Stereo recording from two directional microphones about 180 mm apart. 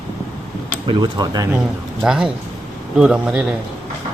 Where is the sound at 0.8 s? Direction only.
25° right (ahead or behind).